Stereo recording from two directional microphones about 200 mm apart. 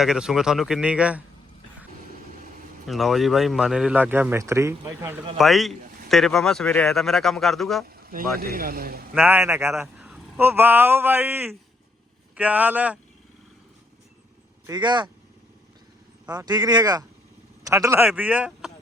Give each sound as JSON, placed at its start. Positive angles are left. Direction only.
{"t": 0.0, "sound": "a man's voice", "side_deg": 0}
{"t": 2.8, "sound": "a man's voice", "side_deg": 0}
{"t": 5.4, "sound": "a man's voice", "side_deg": 0}
{"t": 8.4, "sound": "speech", "side_deg": -45}
{"t": 9.2, "sound": "speech", "side_deg": -10}
{"t": 9.8, "sound": "a man's voice", "side_deg": -5}
{"t": 14.7, "sound": "speech", "side_deg": -20}
{"t": 16.3, "sound": "speech", "side_deg": -20}